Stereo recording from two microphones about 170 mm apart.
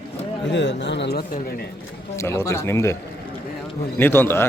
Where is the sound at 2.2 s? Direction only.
15° left (ahead or behind).